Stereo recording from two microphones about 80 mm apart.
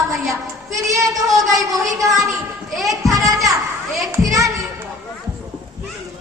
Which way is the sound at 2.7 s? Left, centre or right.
Centre.